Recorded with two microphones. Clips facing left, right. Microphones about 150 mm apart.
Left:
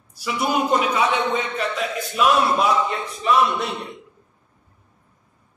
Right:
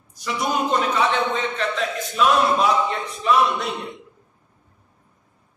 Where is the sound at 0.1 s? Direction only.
5° left (ahead or behind).